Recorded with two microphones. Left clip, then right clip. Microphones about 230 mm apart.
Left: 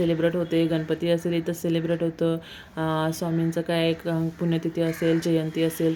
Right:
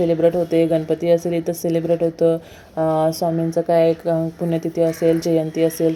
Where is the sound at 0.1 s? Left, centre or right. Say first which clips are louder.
Right 7 dB; centre.